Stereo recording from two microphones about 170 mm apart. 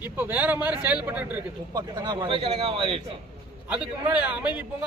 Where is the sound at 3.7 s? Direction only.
5° right (ahead or behind).